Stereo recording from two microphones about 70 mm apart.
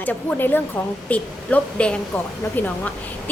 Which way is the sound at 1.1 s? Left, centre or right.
Centre.